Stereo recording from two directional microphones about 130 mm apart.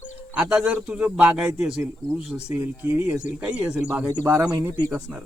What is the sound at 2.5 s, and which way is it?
Speech, 15° right (ahead or behind).